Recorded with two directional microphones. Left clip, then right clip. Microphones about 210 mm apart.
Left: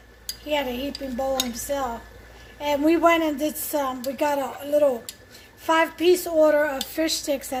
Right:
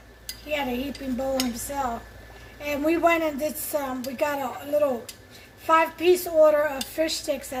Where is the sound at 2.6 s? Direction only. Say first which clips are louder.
Left 3 dB; 50° left (ahead or behind).